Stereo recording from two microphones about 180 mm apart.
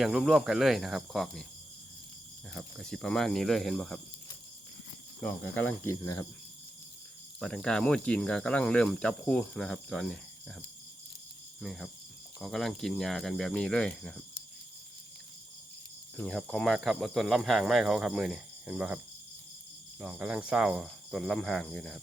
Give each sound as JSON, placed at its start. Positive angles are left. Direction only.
{"t": 0.0, "sound": "speech", "side_deg": 0}
{"t": 2.5, "sound": "speech", "side_deg": 0}
{"t": 5.2, "sound": "speech", "side_deg": 10}
{"t": 7.3, "sound": "speech", "side_deg": 5}
{"t": 11.6, "sound": "speech", "side_deg": 0}
{"t": 16.1, "sound": "speech", "side_deg": 5}
{"t": 20.0, "sound": "speech", "side_deg": -5}